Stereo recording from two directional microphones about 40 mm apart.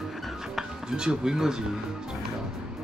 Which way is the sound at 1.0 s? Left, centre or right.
Centre.